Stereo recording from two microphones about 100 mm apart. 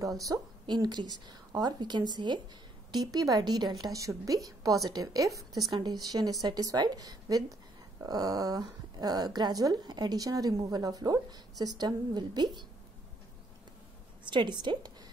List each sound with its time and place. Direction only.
0.2 s speech: 45° right (ahead or behind)
14.3 s a woman's voice: 50° right (ahead or behind)